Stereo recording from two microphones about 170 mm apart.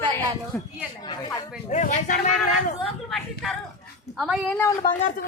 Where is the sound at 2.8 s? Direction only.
Centre (ahead or behind).